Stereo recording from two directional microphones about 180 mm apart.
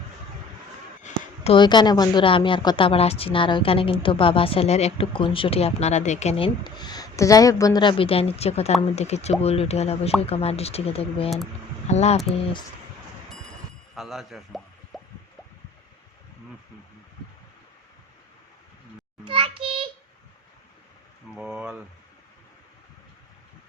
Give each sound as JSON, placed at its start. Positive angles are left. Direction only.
{"t": 1.5, "sound": "a woman's voice", "side_deg": 25}
{"t": 13.9, "sound": "speech", "side_deg": 0}
{"t": 19.2, "sound": "child singing", "side_deg": -30}
{"t": 21.3, "sound": "speech", "side_deg": -5}